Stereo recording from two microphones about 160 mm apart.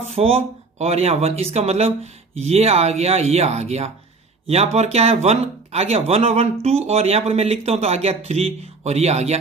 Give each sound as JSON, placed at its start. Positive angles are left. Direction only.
{"t": 0.1, "sound": "speech", "side_deg": -40}